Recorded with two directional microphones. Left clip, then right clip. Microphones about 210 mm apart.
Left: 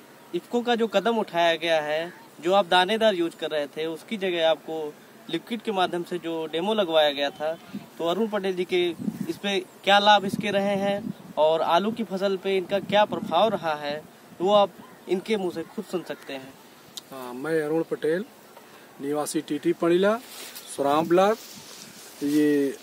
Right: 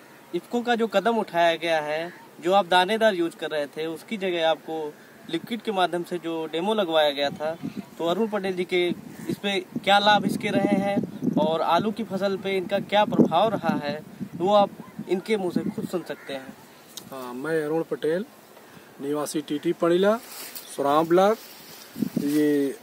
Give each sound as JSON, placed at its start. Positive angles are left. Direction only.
{"t": 0.3, "sound": "speech", "side_deg": -15}
{"t": 16.9, "sound": "speech", "side_deg": 0}